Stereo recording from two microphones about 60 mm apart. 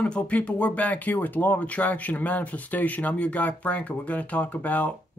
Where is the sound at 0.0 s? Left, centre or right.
Centre.